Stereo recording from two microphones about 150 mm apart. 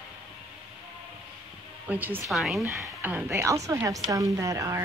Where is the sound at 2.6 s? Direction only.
15° right (ahead or behind).